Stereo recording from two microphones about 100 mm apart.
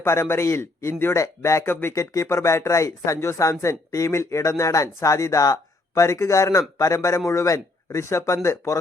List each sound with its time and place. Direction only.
0.0 s speech: 25° left (ahead or behind)